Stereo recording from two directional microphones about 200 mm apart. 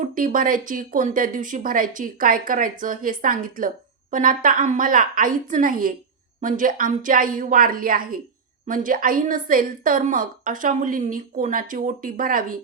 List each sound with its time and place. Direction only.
0.0 s a woman's voice: 45° right (ahead or behind)